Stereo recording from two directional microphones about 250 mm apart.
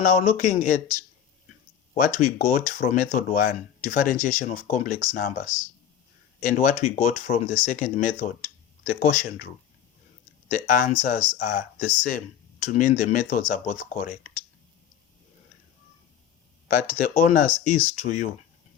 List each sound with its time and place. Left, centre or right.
0.0 s speech: left
10.5 s speech: left
16.6 s speech: left